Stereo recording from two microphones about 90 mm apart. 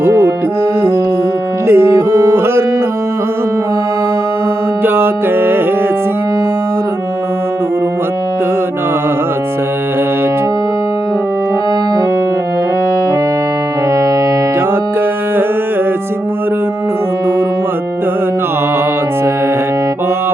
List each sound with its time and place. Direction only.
0.0 s music: 25° right (ahead or behind)
1.6 s music: 30° right (ahead or behind)
4.8 s music: 25° right (ahead or behind)